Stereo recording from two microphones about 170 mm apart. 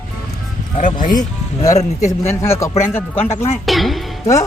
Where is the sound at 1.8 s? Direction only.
40° left (ahead or behind).